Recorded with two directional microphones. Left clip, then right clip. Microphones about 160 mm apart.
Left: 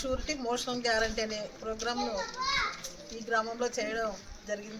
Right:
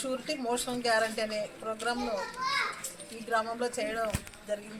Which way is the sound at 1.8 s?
Centre (ahead or behind).